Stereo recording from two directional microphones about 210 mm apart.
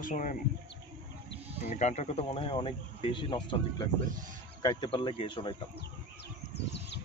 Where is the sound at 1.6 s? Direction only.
35° left (ahead or behind).